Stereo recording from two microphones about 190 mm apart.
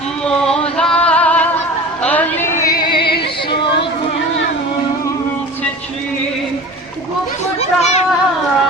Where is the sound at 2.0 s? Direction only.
10° left (ahead or behind); by 3.1 s 25° left (ahead or behind).